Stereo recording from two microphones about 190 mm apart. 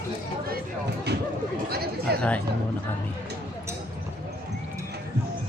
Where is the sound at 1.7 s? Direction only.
55° right (ahead or behind).